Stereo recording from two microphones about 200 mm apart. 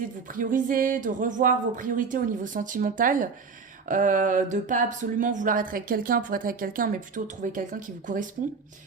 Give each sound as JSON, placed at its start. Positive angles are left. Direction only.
{"t": 0.3, "sound": "speech", "side_deg": -45}